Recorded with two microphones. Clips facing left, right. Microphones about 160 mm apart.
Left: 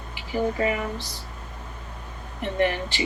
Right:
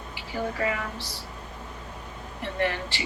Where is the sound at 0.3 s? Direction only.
20° left (ahead or behind).